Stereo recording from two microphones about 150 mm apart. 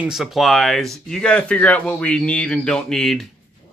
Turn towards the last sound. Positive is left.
turn(degrees=5)  # may be behind; listen again after turning